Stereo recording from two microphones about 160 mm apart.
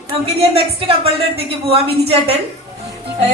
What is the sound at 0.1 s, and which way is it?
A woman's voice, 35° right (ahead or behind).